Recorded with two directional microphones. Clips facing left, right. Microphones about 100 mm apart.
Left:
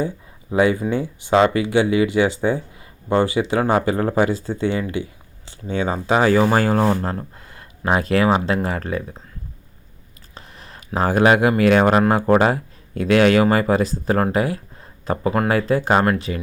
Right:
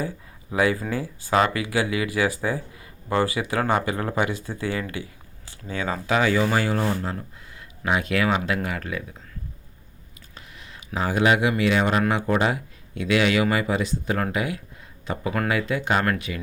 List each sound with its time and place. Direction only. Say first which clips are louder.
0.5 s speech: left 5 dB; 25° left (ahead or behind)
10.3 s speech: left 4 dB; 35° left (ahead or behind)